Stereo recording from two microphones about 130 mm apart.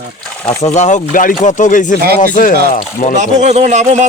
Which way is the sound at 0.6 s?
65° left (ahead or behind).